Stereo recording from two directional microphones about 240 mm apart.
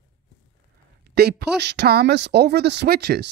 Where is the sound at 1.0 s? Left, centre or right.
Right.